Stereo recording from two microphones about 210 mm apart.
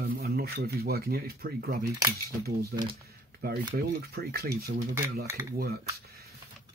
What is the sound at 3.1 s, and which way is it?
Speech, 45° right (ahead or behind).